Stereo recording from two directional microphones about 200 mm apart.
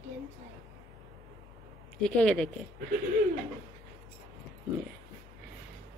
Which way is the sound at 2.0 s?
5° left (ahead or behind).